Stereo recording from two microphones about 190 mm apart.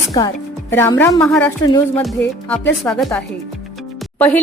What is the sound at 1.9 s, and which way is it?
Music, 5° left (ahead or behind).